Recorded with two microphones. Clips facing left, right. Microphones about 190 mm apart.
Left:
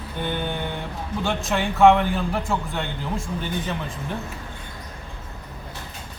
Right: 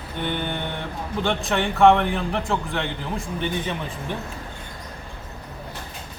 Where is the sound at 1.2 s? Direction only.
Centre (ahead or behind).